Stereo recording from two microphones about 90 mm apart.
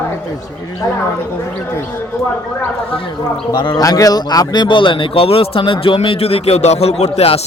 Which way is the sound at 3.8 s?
45° left (ahead or behind).